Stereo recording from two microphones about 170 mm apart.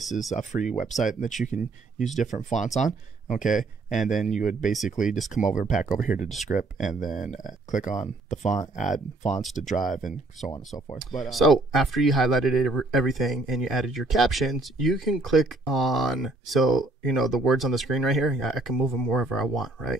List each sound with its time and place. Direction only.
0.4 s speech: 45° left (ahead or behind)
11.2 s speech: centre (ahead or behind)